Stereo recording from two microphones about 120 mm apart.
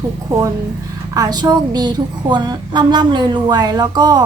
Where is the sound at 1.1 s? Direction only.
35° right (ahead or behind).